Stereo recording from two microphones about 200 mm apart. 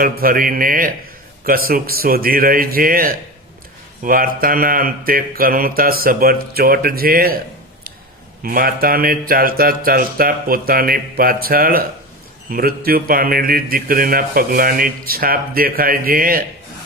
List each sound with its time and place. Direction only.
0.0 s speech: 45° right (ahead or behind)
8.4 s speech: 45° right (ahead or behind)